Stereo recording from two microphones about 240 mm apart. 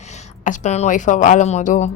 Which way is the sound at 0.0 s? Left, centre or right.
Left.